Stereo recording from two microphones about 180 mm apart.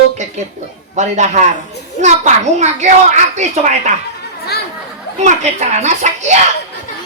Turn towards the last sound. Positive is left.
turn(degrees=-40)  # may be behind; listen again after turning